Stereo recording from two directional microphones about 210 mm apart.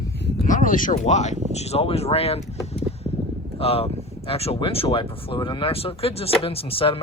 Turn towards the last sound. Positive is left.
turn(degrees=25)  # may be behind; listen again after turning